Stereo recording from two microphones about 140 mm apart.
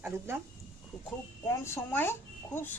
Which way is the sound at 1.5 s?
15° left (ahead or behind).